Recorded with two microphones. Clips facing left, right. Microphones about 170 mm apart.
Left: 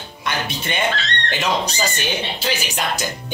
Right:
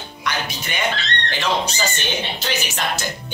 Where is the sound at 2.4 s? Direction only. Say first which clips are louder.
Left 1 dB; 10° left (ahead or behind).